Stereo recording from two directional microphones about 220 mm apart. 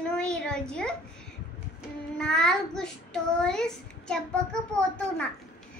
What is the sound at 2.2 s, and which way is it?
A child's voice, 5° left (ahead or behind).